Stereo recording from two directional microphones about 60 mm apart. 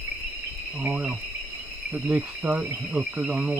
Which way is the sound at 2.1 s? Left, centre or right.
Right.